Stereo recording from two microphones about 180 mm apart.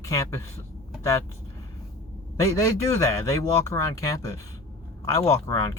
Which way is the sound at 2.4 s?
15° left (ahead or behind).